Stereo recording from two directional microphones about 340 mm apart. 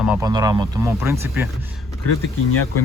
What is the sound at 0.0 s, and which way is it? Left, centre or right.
Speech, centre.